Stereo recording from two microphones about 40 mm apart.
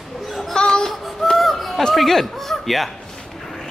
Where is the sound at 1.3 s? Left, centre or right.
Centre.